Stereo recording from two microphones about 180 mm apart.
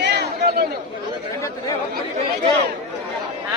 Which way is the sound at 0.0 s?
65° right (ahead or behind).